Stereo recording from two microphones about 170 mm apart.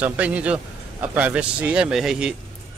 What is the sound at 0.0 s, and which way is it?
Speech, 10° right (ahead or behind).